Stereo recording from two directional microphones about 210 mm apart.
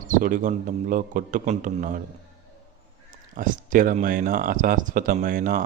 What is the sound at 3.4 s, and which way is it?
Speech, 40° right (ahead or behind).